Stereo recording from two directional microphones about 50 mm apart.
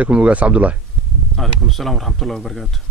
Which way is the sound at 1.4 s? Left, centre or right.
Centre.